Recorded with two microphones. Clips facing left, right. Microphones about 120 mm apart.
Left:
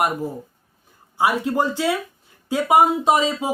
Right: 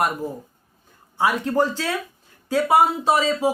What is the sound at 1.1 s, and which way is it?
Speech, 10° left (ahead or behind).